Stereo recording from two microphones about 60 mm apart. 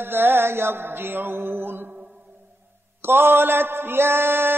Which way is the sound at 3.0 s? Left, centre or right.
Right.